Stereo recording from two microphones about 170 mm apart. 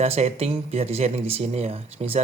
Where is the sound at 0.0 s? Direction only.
40° right (ahead or behind).